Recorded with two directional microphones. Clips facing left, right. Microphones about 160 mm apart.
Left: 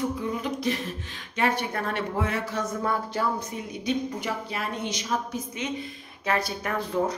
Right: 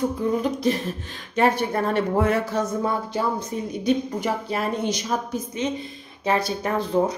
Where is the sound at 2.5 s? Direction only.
20° right (ahead or behind).